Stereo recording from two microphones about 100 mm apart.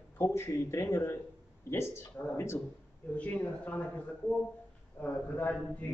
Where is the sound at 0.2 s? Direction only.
25° left (ahead or behind).